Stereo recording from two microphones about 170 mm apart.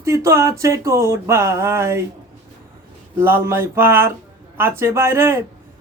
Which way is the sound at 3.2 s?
15° right (ahead or behind).